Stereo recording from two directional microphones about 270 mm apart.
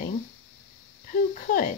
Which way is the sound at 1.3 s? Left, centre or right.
Left.